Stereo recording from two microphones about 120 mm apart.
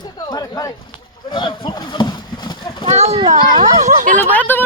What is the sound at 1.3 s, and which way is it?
Speech, 40° left (ahead or behind).